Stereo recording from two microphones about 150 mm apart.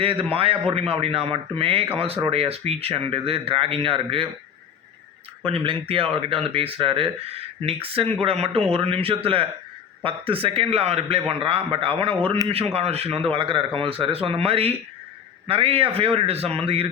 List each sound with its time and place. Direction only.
0.0 s a man's voice: 40° right (ahead or behind)
5.5 s a man's voice: 40° right (ahead or behind)